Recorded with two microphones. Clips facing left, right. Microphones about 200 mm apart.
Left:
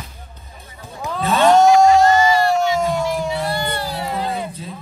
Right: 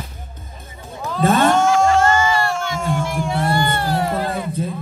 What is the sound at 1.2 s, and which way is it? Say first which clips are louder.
Speech: right 1 dB; 50° right (ahead or behind).